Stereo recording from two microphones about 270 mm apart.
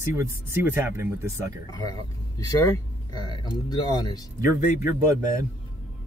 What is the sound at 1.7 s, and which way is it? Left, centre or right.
Speech, centre.